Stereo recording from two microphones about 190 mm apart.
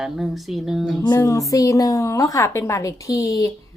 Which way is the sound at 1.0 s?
15° left (ahead or behind).